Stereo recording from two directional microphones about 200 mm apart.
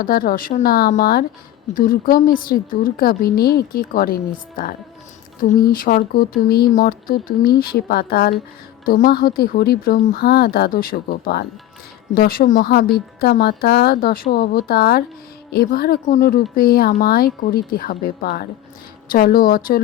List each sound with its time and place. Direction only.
0.0 s a woman's voice: 45° left (ahead or behind)